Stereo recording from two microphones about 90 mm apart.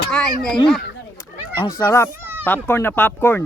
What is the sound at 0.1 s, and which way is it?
Speech, 10° left (ahead or behind).